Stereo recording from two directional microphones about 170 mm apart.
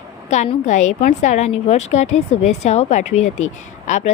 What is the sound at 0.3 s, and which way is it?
A woman's voice, 45° left (ahead or behind).